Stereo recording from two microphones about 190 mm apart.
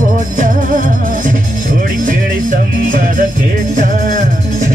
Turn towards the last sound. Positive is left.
turn(degrees=-45)  # may be behind; listen again after turning